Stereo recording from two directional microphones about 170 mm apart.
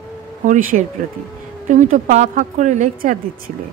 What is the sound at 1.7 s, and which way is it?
A woman's voice, 45° right (ahead or behind).